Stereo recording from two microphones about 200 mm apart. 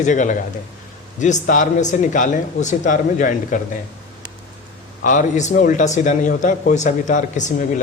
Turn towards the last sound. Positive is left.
turn(degrees=40)  # may be behind; listen again after turning